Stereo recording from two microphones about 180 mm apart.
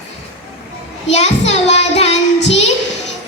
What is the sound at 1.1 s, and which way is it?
Child singing, 35° left (ahead or behind).